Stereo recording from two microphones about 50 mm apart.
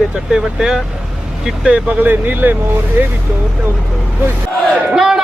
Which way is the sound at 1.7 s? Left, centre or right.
Right.